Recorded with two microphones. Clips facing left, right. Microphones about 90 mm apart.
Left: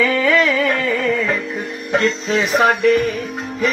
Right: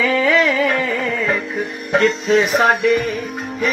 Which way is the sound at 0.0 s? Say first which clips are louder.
Even; 15° right (ahead or behind).